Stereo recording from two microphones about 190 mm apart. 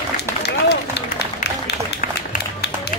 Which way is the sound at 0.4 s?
60° left (ahead or behind).